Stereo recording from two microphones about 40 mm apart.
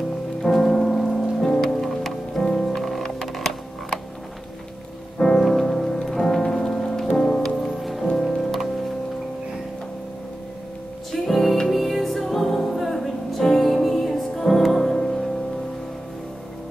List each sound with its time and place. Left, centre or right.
0.4 s rain: centre
1.7 s music: centre
5.2 s music: centre
7.5 s music: centre
11.1 s music: centre